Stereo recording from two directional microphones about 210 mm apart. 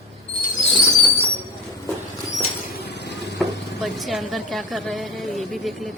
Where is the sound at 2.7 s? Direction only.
55° left (ahead or behind).